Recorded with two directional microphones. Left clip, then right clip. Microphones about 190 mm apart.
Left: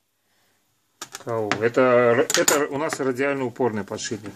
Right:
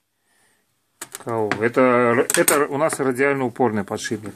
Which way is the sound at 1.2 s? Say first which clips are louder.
Right 2 dB; 50° right (ahead or behind).